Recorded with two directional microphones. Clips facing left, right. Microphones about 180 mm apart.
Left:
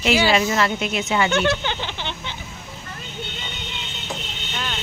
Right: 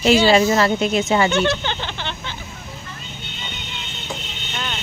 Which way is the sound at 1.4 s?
10° left (ahead or behind).